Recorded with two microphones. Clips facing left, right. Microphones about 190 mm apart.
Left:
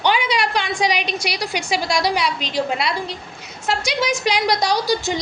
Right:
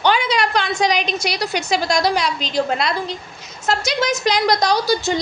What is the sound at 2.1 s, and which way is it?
Speech, 40° right (ahead or behind).